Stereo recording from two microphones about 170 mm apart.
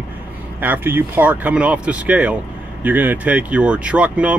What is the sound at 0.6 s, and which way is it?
Speech, 10° right (ahead or behind).